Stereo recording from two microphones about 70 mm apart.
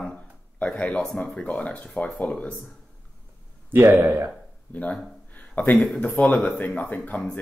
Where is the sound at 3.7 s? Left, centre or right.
Right.